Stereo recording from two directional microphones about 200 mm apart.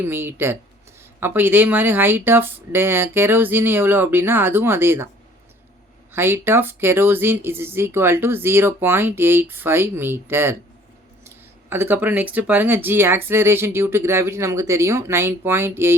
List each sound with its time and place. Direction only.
0.0 s speech: 10° right (ahead or behind)
6.1 s speech: 10° right (ahead or behind)